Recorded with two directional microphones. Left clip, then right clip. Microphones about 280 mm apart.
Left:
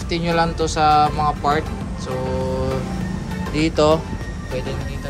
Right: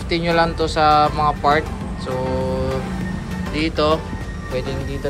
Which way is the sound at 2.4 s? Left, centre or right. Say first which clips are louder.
Right 1 dB; centre.